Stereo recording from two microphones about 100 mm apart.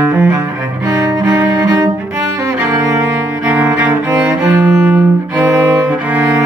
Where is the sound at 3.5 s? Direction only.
15° right (ahead or behind).